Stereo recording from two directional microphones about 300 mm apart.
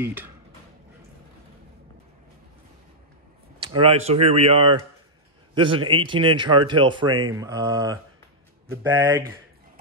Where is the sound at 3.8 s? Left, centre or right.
Centre.